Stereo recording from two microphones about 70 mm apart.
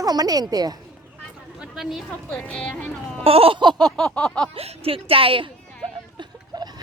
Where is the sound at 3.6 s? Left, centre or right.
Right.